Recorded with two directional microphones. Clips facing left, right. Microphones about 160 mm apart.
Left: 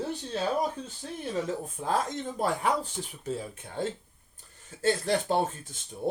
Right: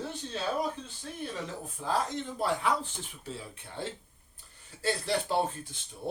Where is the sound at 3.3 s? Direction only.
45° left (ahead or behind).